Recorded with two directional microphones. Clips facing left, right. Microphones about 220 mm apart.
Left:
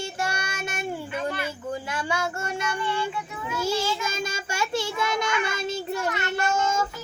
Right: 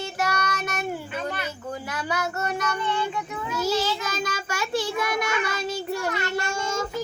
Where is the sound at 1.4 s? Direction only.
25° left (ahead or behind).